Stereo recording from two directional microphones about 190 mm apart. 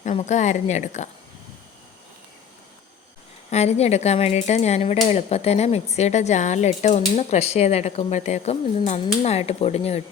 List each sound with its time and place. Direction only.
0.0 s speech: 35° left (ahead or behind)
3.5 s speech: 35° left (ahead or behind)